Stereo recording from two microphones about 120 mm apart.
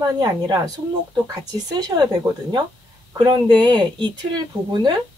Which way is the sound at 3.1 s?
40° right (ahead or behind).